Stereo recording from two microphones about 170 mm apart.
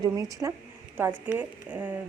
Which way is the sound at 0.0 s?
20° right (ahead or behind).